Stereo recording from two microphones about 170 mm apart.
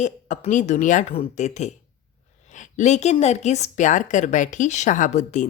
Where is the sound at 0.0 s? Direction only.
45° left (ahead or behind).